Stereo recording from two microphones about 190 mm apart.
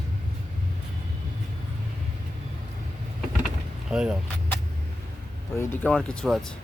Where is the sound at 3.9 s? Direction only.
5° right (ahead or behind).